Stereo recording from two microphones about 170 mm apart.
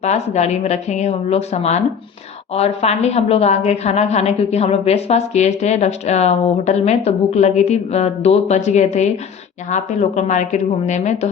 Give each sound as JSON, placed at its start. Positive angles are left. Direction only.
{"t": 0.0, "sound": "a woman's voice", "side_deg": 40}